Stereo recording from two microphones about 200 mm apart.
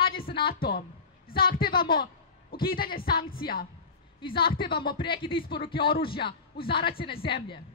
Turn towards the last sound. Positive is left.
turn(degrees=25)  # may be behind; listen again after turning